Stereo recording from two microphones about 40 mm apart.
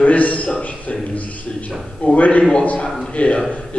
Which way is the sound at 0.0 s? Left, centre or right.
Left.